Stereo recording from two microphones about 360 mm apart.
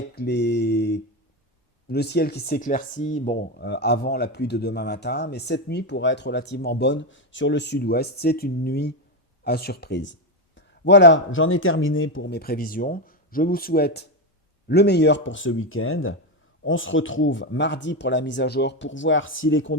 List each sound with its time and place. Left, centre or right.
0.2 s mantra: left
1.9 s speech: left